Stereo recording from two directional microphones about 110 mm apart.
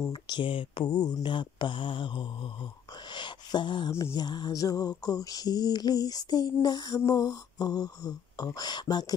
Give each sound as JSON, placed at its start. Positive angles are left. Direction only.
{"t": 0.1, "sound": "mantra", "side_deg": 45}